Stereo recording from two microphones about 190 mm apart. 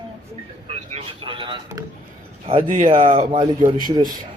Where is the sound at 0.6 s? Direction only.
30° right (ahead or behind).